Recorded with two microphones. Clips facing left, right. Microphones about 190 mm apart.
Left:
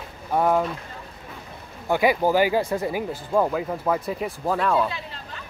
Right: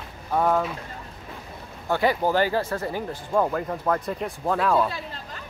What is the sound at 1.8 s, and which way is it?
Speech, 15° left (ahead or behind).